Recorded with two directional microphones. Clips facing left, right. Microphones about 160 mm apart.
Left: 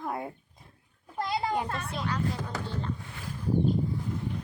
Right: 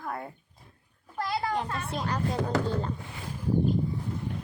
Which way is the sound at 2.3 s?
60° right (ahead or behind).